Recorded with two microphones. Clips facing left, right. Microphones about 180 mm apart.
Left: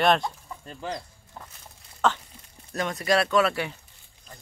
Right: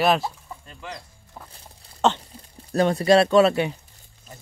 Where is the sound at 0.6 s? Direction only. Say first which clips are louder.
Left 6 dB; 35° left (ahead or behind).